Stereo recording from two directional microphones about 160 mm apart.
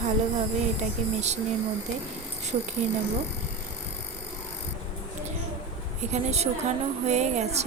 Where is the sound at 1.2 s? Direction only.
45° right (ahead or behind).